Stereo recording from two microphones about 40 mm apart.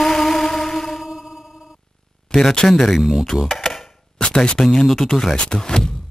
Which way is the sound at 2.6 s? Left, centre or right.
Centre.